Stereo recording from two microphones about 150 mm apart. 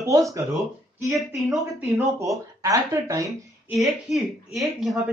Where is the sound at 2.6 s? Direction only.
25° right (ahead or behind).